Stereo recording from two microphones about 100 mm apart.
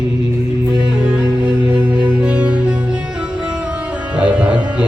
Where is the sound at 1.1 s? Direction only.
10° right (ahead or behind).